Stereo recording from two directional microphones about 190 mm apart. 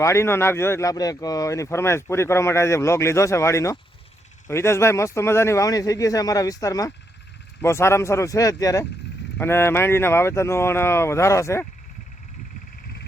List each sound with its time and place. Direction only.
0.0 s speech: 15° left (ahead or behind)